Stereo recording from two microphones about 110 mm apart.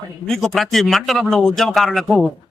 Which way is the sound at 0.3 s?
5° left (ahead or behind).